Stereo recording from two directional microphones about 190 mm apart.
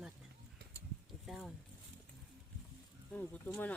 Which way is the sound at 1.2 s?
Centre (ahead or behind).